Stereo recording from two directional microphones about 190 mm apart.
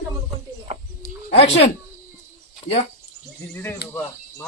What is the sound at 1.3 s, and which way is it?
Speech, 35° left (ahead or behind).